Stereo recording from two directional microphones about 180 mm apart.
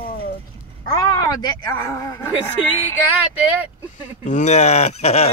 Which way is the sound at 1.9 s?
15° left (ahead or behind).